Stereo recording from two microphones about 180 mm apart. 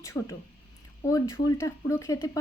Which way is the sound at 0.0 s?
15° left (ahead or behind).